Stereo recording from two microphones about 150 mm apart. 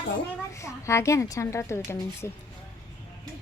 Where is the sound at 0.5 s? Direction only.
20° left (ahead or behind).